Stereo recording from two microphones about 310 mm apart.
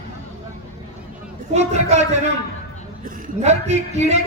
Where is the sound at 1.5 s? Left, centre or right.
Right.